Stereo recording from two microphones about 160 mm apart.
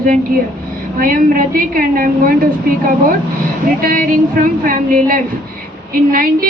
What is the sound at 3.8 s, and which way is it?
A woman's voice, 60° right (ahead or behind).